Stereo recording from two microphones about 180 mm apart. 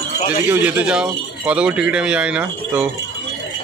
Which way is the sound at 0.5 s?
10° right (ahead or behind).